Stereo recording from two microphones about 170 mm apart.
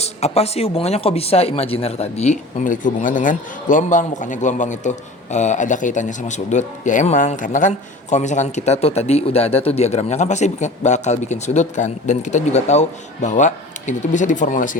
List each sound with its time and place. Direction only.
0.0 s speech: 40° left (ahead or behind)